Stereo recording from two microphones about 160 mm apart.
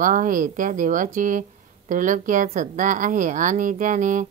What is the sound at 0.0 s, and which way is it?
A woman's voice, 55° right (ahead or behind).